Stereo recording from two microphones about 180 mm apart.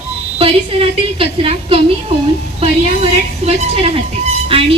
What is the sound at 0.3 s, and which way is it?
A woman's voice, 30° right (ahead or behind).